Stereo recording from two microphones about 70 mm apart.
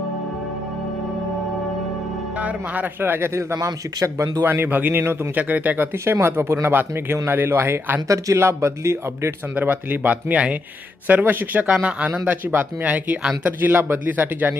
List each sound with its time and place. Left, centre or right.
2.3 s speech: centre; by 7.9 s right
8.0 s speech: right
9.6 s speech: right